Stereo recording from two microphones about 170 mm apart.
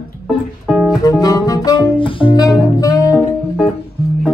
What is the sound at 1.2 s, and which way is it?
Music, 20° left (ahead or behind).